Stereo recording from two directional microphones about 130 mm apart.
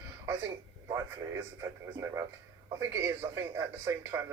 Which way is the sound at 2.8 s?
20° right (ahead or behind).